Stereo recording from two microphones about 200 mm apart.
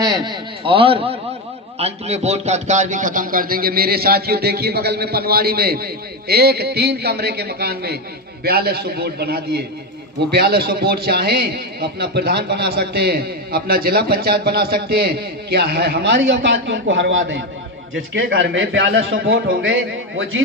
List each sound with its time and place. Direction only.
0.0 s a man's voice: 20° right (ahead or behind); by 19.7 s 60° right (ahead or behind)